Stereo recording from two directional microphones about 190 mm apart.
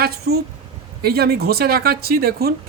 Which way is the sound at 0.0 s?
55° right (ahead or behind).